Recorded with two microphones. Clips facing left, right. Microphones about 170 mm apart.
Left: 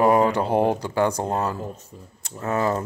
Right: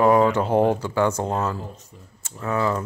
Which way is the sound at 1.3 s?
40° left (ahead or behind).